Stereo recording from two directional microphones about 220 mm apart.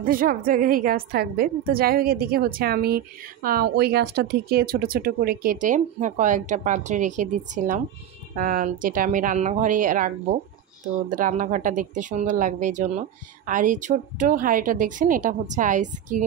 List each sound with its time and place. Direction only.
0.0 s a woman's voice: 40° right (ahead or behind)